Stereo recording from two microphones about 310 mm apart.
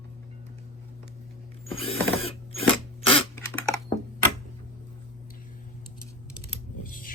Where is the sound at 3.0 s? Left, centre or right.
Centre.